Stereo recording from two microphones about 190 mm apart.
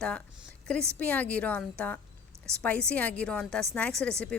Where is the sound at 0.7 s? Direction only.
5° left (ahead or behind).